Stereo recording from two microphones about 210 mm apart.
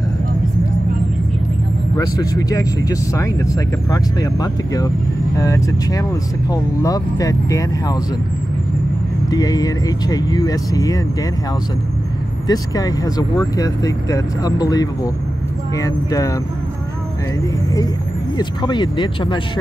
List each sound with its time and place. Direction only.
2.0 s speech: 15° left (ahead or behind)
9.3 s speech: 15° left (ahead or behind)
12.4 s speech: 15° left (ahead or behind)
18.4 s speech: 20° left (ahead or behind)